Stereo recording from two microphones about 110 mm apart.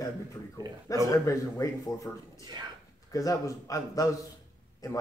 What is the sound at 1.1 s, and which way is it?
Speech, 30° left (ahead or behind).